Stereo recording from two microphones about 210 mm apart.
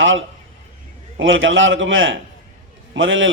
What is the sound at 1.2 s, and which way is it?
A man's voice, 65° right (ahead or behind).